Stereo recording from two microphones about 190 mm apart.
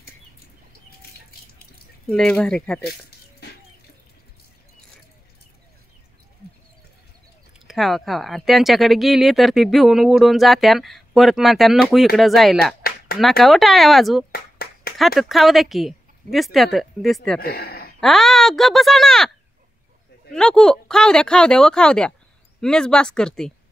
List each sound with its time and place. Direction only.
2.0 s speech: 5° left (ahead or behind)
3.4 s water: 60° left (ahead or behind)
7.5 s speech: centre (ahead or behind)
12.8 s a sound: 50° left (ahead or behind)
13.4 s speech: centre (ahead or behind)
14.3 s a sound: 55° left (ahead or behind)
15.0 s speech: centre (ahead or behind)
17.4 s speech: 55° left (ahead or behind)
18.0 s speech: centre (ahead or behind)
20.3 s speech: 5° left (ahead or behind)